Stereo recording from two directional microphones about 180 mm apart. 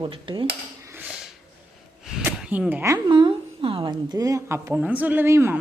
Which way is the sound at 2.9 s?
25° right (ahead or behind).